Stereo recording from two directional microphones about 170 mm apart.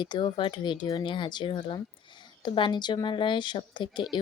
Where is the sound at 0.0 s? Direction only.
30° left (ahead or behind).